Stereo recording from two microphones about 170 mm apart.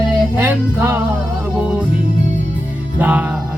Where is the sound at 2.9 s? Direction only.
10° right (ahead or behind).